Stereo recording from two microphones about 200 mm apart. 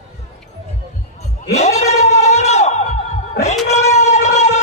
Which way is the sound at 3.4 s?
35° left (ahead or behind).